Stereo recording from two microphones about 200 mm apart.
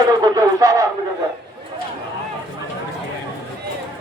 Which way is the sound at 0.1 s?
20° right (ahead or behind).